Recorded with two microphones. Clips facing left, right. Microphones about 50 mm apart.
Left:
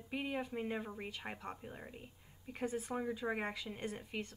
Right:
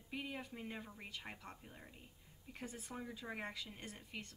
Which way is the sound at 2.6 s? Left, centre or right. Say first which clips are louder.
Left 12 dB; centre.